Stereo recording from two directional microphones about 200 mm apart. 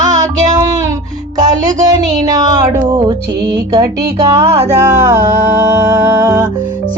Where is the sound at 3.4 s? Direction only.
55° right (ahead or behind).